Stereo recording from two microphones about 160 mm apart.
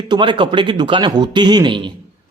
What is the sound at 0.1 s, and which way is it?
A man's voice, 30° right (ahead or behind).